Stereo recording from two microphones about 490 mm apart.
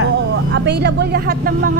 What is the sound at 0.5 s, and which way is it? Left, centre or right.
Speech, right.